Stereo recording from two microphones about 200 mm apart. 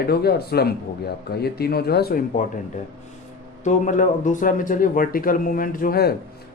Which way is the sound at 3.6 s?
40° left (ahead or behind).